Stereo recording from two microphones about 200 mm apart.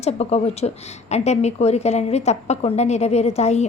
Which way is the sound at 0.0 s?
30° left (ahead or behind).